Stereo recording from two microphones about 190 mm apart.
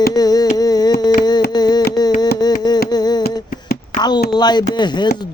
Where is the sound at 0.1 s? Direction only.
20° left (ahead or behind).